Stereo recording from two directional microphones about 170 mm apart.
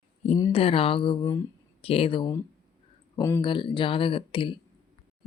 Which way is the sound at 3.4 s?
30° left (ahead or behind).